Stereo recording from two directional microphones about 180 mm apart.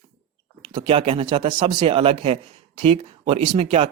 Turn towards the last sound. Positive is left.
turn(degrees=-30)  # may be behind; listen again after turning